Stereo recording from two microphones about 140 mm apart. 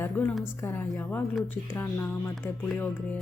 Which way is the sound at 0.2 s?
15° left (ahead or behind).